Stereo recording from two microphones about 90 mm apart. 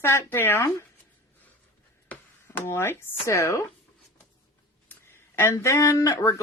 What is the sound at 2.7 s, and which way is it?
Speech, 25° left (ahead or behind).